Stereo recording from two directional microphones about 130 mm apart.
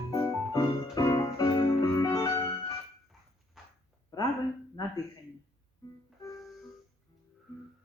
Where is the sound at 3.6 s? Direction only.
Centre (ahead or behind).